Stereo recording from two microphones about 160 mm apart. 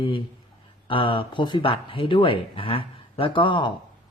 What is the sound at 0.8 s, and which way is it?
Speech, 30° left (ahead or behind).